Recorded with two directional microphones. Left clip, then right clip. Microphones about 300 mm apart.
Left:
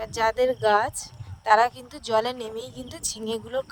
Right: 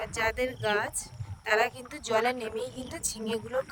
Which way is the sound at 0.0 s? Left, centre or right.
Centre.